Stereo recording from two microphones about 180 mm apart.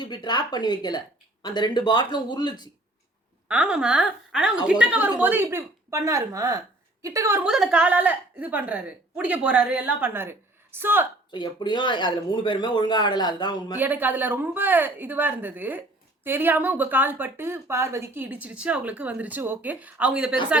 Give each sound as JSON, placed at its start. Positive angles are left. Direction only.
{"t": 0.0, "sound": "speech", "side_deg": 25}
{"t": 3.5, "sound": "a woman's voice", "side_deg": -5}
{"t": 11.3, "sound": "speech", "side_deg": 25}
{"t": 13.7, "sound": "speech", "side_deg": -10}